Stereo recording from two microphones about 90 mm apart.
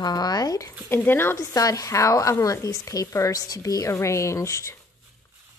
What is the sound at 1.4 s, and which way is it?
A woman's voice, 40° left (ahead or behind).